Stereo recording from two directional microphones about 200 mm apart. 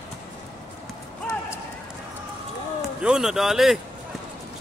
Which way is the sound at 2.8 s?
5° right (ahead or behind).